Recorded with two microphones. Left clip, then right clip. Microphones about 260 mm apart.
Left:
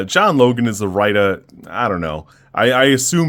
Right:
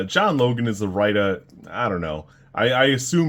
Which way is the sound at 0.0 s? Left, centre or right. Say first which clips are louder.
Left 6 dB; left.